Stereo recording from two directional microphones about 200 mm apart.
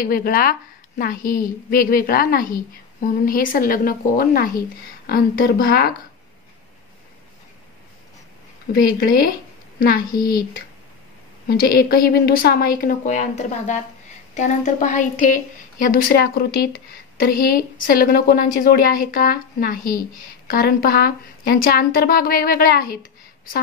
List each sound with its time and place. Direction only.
0.0 s a woman's voice: 45° left (ahead or behind)
8.7 s a woman's voice: 50° left (ahead or behind)
11.4 s a woman's voice: 50° left (ahead or behind)